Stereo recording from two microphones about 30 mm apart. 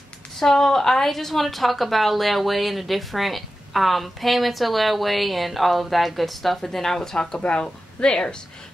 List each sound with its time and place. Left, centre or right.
0.4 s a woman's voice: centre